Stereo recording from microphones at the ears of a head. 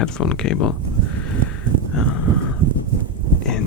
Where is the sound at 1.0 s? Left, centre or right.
Right.